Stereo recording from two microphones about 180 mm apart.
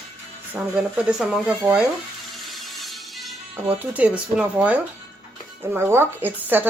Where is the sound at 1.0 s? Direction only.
5° right (ahead or behind).